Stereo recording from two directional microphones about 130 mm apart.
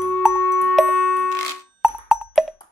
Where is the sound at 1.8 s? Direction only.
Centre (ahead or behind).